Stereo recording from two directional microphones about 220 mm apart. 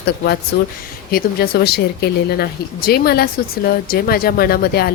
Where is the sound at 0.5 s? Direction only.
50° left (ahead or behind).